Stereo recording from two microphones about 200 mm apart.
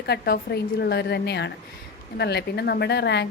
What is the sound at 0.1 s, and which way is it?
A woman's voice, 55° left (ahead or behind).